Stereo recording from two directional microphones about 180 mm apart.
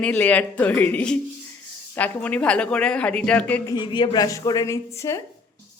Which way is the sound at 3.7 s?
25° left (ahead or behind).